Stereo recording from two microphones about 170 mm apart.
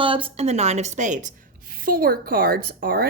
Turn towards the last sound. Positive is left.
turn(degrees=-60)  # may be behind; listen again after turning